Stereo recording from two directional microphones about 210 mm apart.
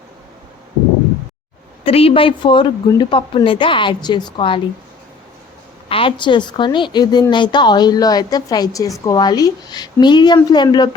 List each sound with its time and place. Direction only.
1.8 s a woman's voice: 25° left (ahead or behind)
5.9 s a woman's voice: 25° left (ahead or behind)